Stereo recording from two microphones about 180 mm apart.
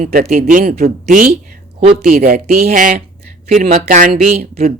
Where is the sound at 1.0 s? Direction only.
40° right (ahead or behind).